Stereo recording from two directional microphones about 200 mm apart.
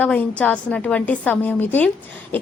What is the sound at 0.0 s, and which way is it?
A woman's voice, 5° left (ahead or behind).